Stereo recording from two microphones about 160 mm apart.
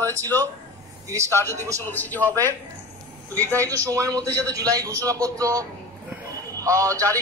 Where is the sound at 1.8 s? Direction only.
10° left (ahead or behind).